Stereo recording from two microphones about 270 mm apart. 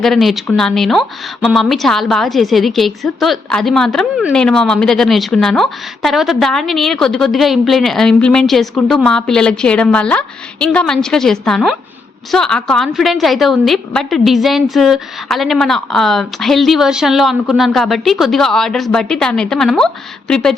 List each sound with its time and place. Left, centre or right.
0.0 s a woman's voice: centre